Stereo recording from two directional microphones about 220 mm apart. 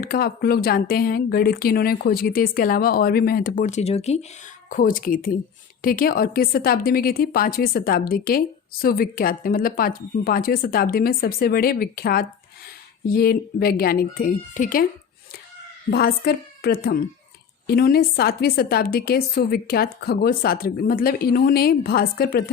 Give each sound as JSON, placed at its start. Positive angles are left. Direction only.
{"t": 0.0, "sound": "a woman's voice", "side_deg": 40}
{"t": 15.9, "sound": "a woman's voice", "side_deg": 45}